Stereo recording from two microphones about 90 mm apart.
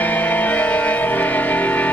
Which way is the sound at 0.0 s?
20° left (ahead or behind).